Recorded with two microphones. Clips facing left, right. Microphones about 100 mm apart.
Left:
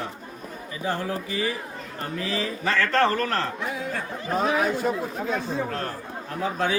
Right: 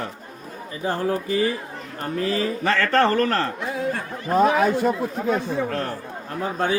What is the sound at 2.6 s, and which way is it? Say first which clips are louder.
Speech: right 2 dB; 65° right (ahead or behind).